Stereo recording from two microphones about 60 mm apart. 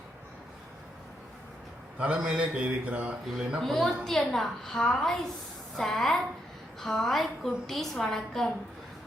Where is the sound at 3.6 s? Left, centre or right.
Centre.